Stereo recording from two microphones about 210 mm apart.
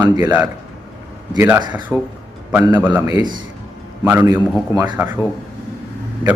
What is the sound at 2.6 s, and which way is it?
Speech, 10° right (ahead or behind).